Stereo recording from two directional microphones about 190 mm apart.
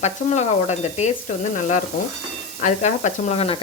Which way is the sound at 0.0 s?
35° left (ahead or behind).